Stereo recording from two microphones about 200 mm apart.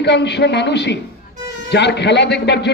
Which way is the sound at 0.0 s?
60° left (ahead or behind).